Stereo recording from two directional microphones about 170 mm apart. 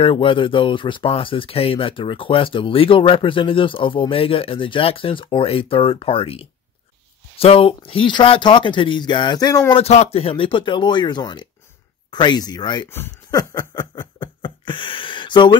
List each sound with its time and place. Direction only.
0.0 s speech: 30° left (ahead or behind)
9.8 s speech: 35° left (ahead or behind)
12.9 s a sound: 15° left (ahead or behind)